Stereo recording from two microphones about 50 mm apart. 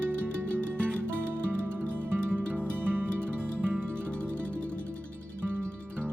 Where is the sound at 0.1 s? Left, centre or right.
Right.